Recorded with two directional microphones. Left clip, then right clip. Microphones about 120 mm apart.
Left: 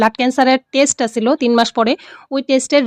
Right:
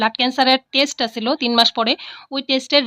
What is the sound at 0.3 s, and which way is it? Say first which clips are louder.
Speech: left 2 dB; 40° left (ahead or behind).